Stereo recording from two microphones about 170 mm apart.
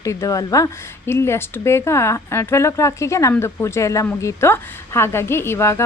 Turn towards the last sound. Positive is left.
turn(degrees=15)  # may be behind; listen again after turning